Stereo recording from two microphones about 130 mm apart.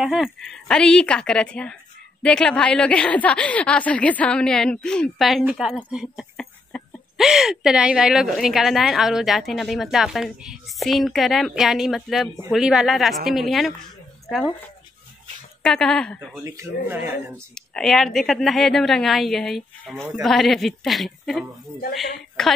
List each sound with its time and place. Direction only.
0.0 s a woman's voice: 5° right (ahead or behind)
6.3 s a sound: 5° left (ahead or behind)
7.2 s a woman's voice: 5° right (ahead or behind)
15.6 s a woman's voice: 5° left (ahead or behind)
16.4 s speech: 20° right (ahead or behind)
17.6 s a woman's voice: 5° left (ahead or behind)